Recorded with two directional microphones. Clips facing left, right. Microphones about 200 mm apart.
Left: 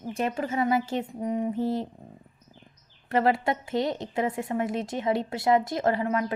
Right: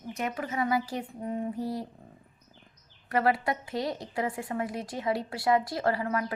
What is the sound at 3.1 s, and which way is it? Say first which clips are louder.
A woman's voice: left 3 dB; 25° left (ahead or behind).